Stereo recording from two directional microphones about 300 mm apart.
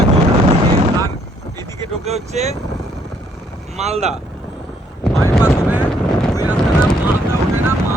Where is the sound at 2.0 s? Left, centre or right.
Right.